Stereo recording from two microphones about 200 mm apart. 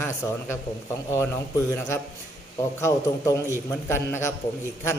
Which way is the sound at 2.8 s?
15° left (ahead or behind).